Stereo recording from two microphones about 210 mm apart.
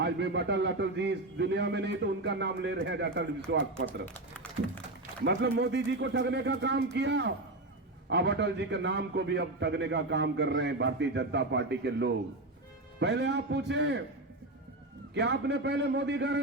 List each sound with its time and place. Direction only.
0.0 s a man's voice: 55° right (ahead or behind)
5.2 s a man's voice: 55° right (ahead or behind)
15.1 s a man's voice: 55° right (ahead or behind)